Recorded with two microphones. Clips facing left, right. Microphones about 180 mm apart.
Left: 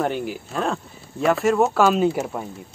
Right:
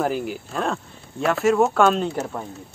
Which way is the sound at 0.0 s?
Centre (ahead or behind).